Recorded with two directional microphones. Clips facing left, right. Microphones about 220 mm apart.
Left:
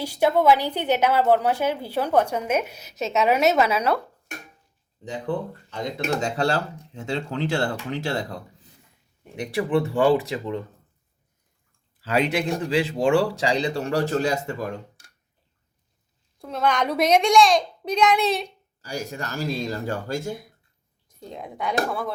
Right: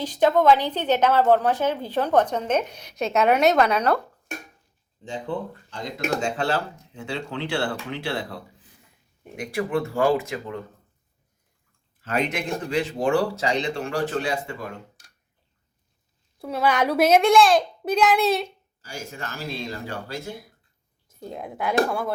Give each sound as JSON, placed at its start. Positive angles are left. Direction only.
{"t": 0.0, "sound": "a woman's voice", "side_deg": 10}
{"t": 6.2, "sound": "speech", "side_deg": 40}
{"t": 12.1, "sound": "speech", "side_deg": 30}
{"t": 16.4, "sound": "a child's voice", "side_deg": -5}
{"t": 18.8, "sound": "speech", "side_deg": 40}
{"t": 21.1, "sound": "a child's voice", "side_deg": -5}